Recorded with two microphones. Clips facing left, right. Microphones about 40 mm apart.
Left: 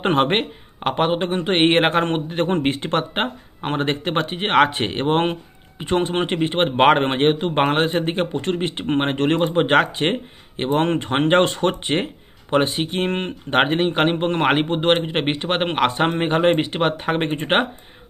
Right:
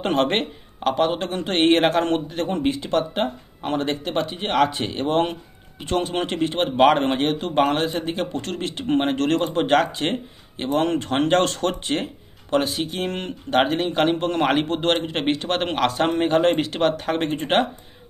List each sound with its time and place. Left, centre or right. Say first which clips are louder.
0.0 s speech: left 2 dB; left
0.7 s a man's voice: left 1 dB; left
8.3 s speech: left 5 dB; left